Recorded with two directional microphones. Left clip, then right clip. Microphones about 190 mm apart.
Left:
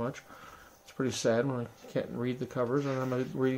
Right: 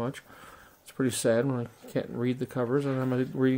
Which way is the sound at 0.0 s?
45° right (ahead or behind).